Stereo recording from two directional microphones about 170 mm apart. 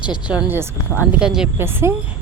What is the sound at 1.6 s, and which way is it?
Speech, 15° right (ahead or behind).